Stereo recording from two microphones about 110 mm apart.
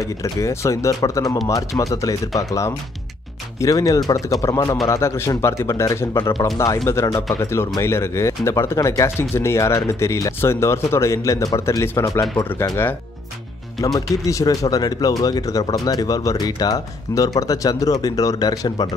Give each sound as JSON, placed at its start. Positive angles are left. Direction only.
{"t": 0.0, "sound": "speech", "side_deg": 30}
{"t": 3.6, "sound": "speech", "side_deg": 30}
{"t": 13.7, "sound": "speech", "side_deg": 35}